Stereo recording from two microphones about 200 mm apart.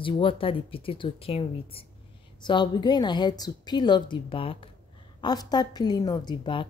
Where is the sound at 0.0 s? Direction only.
25° left (ahead or behind).